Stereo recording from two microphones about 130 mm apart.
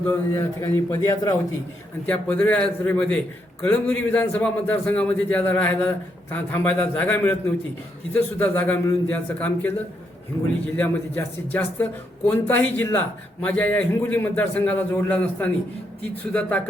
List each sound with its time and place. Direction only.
0.1 s a man's voice: 20° left (ahead or behind)
2.0 s a man's voice: 10° left (ahead or behind)
10.8 s a man's voice: 15° left (ahead or behind)